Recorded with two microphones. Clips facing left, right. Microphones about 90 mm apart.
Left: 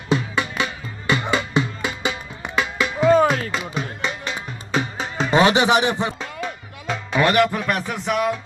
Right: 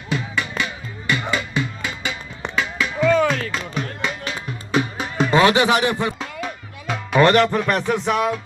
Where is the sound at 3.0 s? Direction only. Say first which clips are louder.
Left 2 dB; 35° left (ahead or behind).